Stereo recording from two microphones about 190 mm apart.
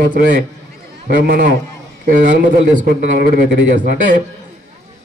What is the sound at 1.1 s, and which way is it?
A man's voice, 50° right (ahead or behind).